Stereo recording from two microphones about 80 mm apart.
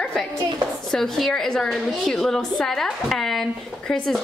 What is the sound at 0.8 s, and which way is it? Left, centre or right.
A woman's voice, centre.